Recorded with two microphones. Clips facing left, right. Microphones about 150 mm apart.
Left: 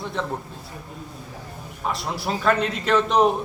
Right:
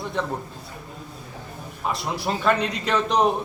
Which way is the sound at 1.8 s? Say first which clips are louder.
Right 1 dB; centre (ahead or behind).